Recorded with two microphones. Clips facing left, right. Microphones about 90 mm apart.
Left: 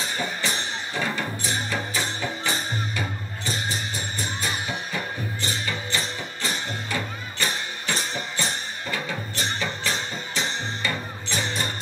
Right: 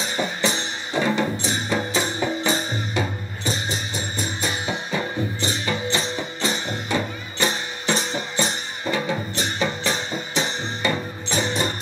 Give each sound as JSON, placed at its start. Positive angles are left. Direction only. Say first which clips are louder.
{"t": 0.0, "sound": "music", "louder": "right 4 dB", "side_deg": -20}